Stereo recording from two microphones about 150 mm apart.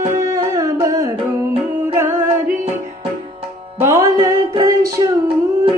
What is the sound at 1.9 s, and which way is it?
A capella, 15° right (ahead or behind).